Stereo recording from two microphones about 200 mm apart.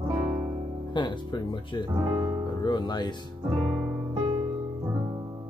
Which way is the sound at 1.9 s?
20° right (ahead or behind).